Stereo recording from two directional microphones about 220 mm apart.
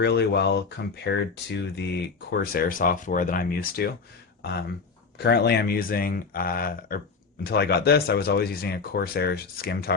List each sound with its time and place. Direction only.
0.0 s speech: 50° left (ahead or behind)
5.1 s speech: 45° left (ahead or behind)